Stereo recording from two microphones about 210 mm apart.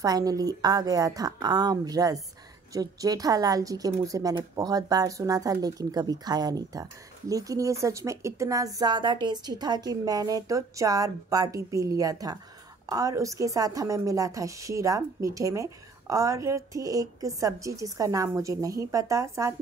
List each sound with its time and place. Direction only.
0.0 s a woman's voice: 15° right (ahead or behind)